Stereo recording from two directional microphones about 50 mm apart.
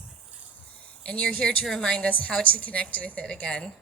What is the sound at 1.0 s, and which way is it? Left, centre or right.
Speech, left.